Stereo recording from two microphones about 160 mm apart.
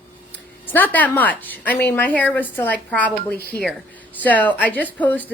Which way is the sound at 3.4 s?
70° left (ahead or behind).